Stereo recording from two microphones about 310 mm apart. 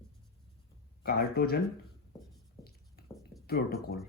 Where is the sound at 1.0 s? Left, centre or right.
Left.